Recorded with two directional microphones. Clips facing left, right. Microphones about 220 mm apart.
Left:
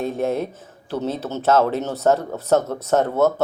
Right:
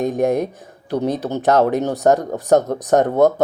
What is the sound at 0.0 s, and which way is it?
Speech, 15° right (ahead or behind).